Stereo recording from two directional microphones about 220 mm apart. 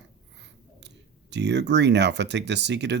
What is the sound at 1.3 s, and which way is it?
Speech, 50° right (ahead or behind).